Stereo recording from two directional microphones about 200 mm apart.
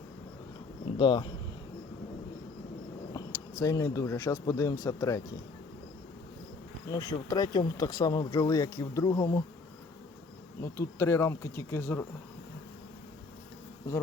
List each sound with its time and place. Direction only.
0.9 s speech: 25° left (ahead or behind)
3.6 s speech: 15° left (ahead or behind)
6.8 s speech: 15° left (ahead or behind)
10.6 s speech: 15° left (ahead or behind)